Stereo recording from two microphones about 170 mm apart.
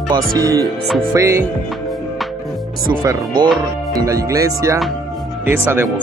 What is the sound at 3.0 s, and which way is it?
Speech, 25° right (ahead or behind).